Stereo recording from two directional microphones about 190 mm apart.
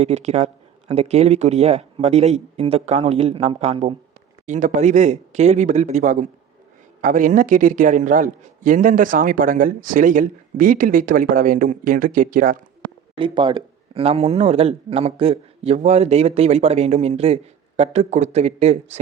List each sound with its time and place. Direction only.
0.0 s a man's voice: 35° right (ahead or behind)
13.1 s speech: 25° right (ahead or behind)